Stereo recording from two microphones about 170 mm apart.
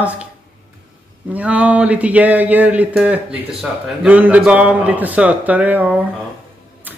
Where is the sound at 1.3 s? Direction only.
10° right (ahead or behind).